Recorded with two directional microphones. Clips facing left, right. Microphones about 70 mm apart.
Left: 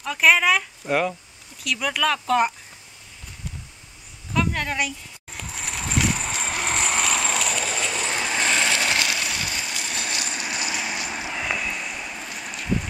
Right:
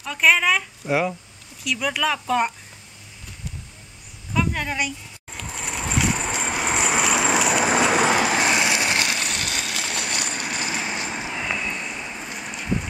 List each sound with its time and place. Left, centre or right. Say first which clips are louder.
0.0 s speech: left 1 dB; centre
4.3 s a sound: even; centre
7.5 s train: right 8 dB; right
8.3 s vehicle: right 2 dB; centre
9.2 s vehicle: right 1 dB; right
10.5 s vehicle: even; right
11.1 s vehicle: right 1 dB; centre
11.3 s a sound: left 1 dB; centre